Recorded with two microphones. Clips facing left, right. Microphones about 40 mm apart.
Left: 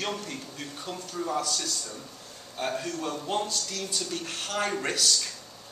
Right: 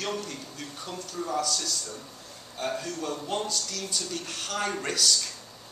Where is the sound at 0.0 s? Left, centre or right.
Centre.